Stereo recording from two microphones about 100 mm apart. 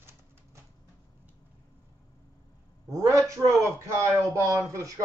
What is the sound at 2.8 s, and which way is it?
A man's voice, 30° right (ahead or behind).